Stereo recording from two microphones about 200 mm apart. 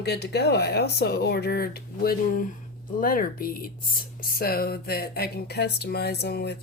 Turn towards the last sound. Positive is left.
turn(degrees=55)  # may be behind; listen again after turning